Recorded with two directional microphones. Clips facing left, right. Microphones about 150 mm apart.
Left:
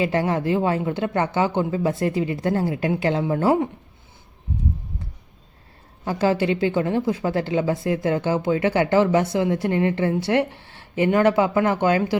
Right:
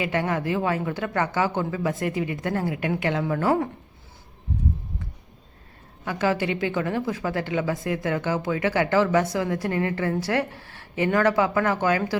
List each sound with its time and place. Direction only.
0.0 s speech: 30° left (ahead or behind)
6.1 s speech: 30° left (ahead or behind)